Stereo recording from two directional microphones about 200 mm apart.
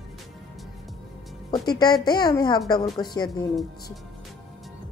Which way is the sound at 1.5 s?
20° left (ahead or behind).